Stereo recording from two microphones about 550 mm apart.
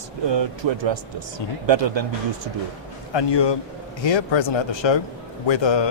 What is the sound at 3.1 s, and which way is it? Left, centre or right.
Speech, left.